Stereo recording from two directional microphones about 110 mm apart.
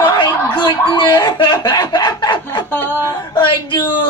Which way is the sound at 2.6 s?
20° left (ahead or behind).